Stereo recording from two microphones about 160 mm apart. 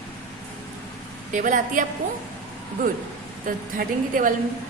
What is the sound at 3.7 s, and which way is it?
Speech, 55° right (ahead or behind).